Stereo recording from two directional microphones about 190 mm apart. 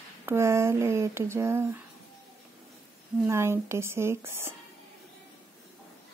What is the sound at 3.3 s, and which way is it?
Speech, 15° right (ahead or behind).